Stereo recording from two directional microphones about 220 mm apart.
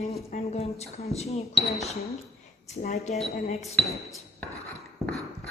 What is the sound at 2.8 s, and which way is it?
Speech, 35° left (ahead or behind).